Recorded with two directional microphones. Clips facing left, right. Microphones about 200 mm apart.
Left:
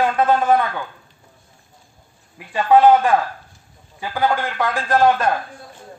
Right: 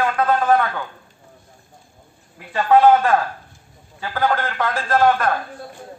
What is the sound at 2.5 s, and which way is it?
A man's voice, 15° left (ahead or behind).